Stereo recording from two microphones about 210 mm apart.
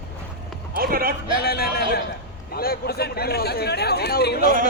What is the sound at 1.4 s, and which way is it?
Speech, 45° left (ahead or behind).